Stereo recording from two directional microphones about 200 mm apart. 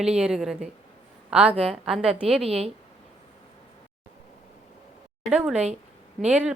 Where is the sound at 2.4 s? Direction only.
30° right (ahead or behind).